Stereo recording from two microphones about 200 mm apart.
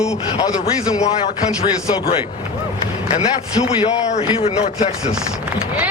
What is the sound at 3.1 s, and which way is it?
A man's voice, 25° left (ahead or behind).